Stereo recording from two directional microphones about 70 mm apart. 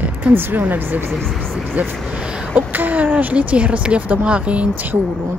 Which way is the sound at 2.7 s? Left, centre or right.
Right.